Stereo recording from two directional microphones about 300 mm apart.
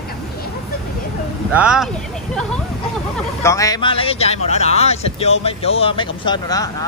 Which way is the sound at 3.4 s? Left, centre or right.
Centre.